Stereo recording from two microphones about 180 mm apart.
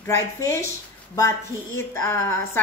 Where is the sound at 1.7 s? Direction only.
15° left (ahead or behind).